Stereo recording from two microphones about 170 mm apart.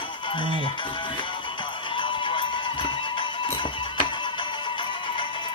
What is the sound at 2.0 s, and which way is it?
Music, 30° left (ahead or behind).